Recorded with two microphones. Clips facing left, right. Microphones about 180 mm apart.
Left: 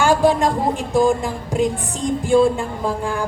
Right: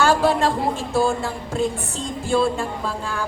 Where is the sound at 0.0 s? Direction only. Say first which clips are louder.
Left 2 dB; 15° left (ahead or behind).